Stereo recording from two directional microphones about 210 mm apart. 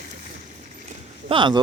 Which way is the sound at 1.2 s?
25° right (ahead or behind).